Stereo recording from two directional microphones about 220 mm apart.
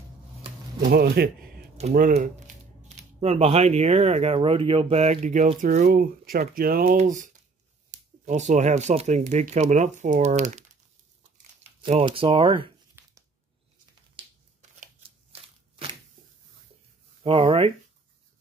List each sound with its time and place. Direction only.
0.7 s speech: 45° right (ahead or behind)
11.8 s speech: 25° right (ahead or behind)
13.0 s a sound: 10° right (ahead or behind)
14.1 s shuffling cards: 30° right (ahead or behind)
17.2 s speech: 25° right (ahead or behind)